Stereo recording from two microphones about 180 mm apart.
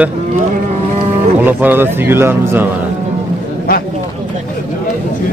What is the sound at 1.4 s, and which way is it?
Speech, 10° right (ahead or behind).